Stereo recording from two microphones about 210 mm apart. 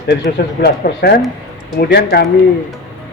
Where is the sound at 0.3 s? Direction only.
50° left (ahead or behind).